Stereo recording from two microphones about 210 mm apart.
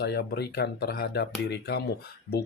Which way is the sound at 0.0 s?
50° left (ahead or behind).